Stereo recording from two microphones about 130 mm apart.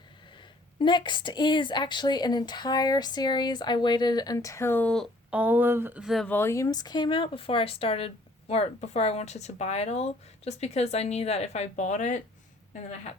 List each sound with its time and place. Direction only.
0.8 s a woman's voice: 35° left (ahead or behind); by 5.0 s 10° left (ahead or behind)
5.3 s speech: 10° right (ahead or behind)
6.0 s speech: centre (ahead or behind)
6.2 s speech: 20° left (ahead or behind); by 12.2 s 65° left (ahead or behind)